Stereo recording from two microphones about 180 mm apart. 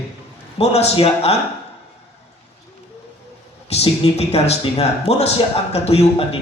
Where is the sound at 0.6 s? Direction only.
35° left (ahead or behind).